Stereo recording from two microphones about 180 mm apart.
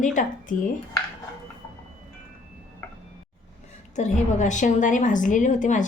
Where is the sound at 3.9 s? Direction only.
40° left (ahead or behind).